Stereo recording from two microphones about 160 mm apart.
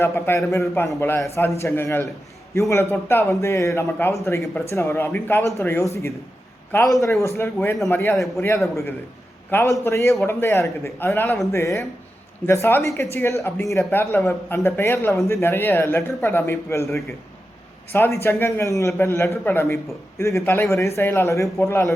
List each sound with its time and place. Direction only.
0.0 s a man's voice: 15° left (ahead or behind)